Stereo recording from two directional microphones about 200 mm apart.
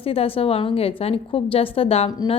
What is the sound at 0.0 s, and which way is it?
A woman's voice, 30° left (ahead or behind).